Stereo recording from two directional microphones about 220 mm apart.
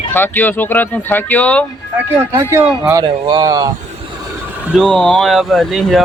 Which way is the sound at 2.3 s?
10° right (ahead or behind).